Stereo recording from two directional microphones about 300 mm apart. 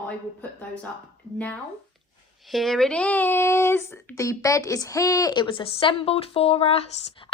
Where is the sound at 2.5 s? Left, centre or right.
Centre.